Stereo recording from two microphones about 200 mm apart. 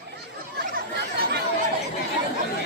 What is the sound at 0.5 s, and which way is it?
Chatter, 55° right (ahead or behind).